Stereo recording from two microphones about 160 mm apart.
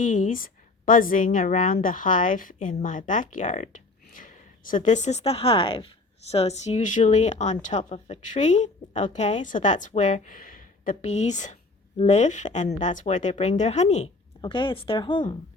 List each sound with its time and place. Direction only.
0.0 s a woman's voice: 55° left (ahead or behind)
14.4 s speech: 30° left (ahead or behind)